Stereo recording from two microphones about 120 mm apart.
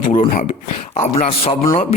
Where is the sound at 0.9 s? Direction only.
50° left (ahead or behind).